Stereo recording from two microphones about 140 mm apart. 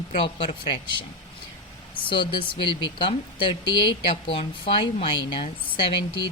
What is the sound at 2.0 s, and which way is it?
Speech, 35° left (ahead or behind).